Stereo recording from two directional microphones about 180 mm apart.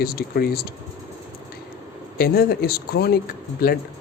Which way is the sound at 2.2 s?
55° left (ahead or behind).